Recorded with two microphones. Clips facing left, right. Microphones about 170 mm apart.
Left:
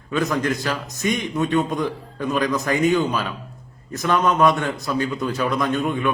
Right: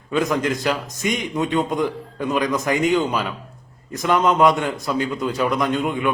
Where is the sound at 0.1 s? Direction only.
20° right (ahead or behind).